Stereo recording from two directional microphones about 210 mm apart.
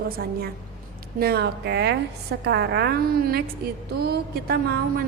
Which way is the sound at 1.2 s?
50° right (ahead or behind).